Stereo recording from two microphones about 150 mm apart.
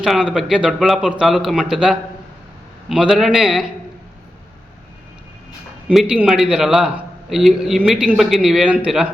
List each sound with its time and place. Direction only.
0.0 s a man's voice: 5° right (ahead or behind)
5.9 s a man's voice: 5° right (ahead or behind)